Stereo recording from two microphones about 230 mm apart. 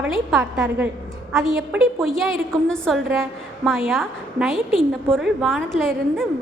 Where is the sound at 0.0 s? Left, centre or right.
Centre.